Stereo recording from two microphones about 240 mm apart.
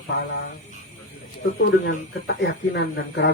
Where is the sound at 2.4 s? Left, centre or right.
Left.